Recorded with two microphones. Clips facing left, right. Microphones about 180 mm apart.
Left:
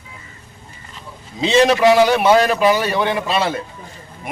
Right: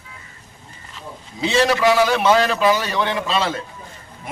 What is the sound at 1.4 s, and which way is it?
Speech, 20° left (ahead or behind).